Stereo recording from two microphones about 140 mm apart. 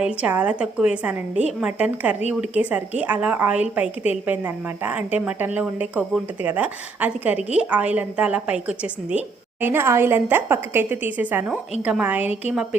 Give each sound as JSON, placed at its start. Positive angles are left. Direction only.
{"t": 0.0, "sound": "a woman's voice", "side_deg": -10}